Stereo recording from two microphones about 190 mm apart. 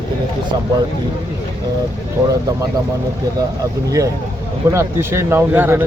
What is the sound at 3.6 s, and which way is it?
Speech, 15° right (ahead or behind).